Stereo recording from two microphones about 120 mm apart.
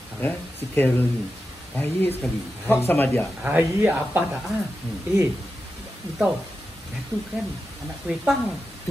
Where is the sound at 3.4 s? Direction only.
15° right (ahead or behind).